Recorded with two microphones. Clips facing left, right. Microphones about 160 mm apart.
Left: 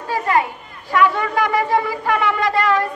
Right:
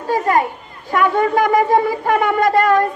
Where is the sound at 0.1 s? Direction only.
45° right (ahead or behind).